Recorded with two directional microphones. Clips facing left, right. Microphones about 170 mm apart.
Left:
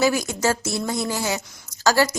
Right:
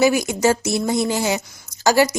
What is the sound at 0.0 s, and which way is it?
Speech, 15° right (ahead or behind).